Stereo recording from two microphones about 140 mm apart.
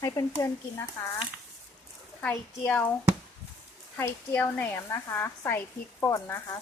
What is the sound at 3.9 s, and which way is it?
Speech, 15° left (ahead or behind).